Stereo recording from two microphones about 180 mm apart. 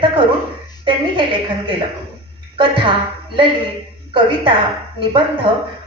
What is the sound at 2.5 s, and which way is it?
Speech, 30° right (ahead or behind).